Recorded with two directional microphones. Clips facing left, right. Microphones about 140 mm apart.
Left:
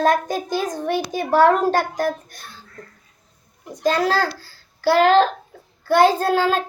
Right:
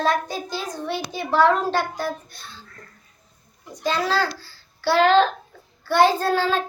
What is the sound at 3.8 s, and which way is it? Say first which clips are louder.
A child's voice: left 3 dB; 45° left (ahead or behind).